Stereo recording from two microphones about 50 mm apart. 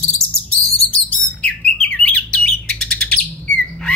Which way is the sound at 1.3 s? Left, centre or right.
Left.